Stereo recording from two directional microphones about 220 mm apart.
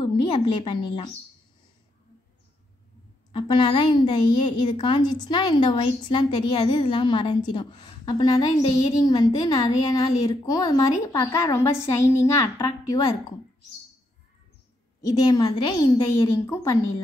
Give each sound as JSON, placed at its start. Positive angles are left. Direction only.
{"t": 0.0, "sound": "a woman's voice", "side_deg": 20}
{"t": 3.3, "sound": "a woman's voice", "side_deg": 25}
{"t": 15.0, "sound": "a woman's voice", "side_deg": 15}